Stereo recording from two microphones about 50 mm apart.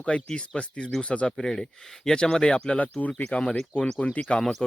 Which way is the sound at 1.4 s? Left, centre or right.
Centre.